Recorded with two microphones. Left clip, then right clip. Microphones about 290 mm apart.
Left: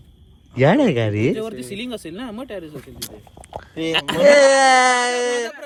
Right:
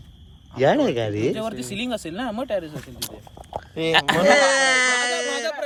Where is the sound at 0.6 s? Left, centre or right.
Centre.